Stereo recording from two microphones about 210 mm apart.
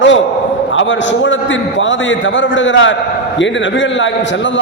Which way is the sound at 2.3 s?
65° left (ahead or behind).